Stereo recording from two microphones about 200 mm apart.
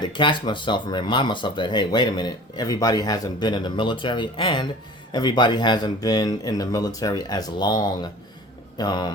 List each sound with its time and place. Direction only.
0.0 s speech: 25° left (ahead or behind)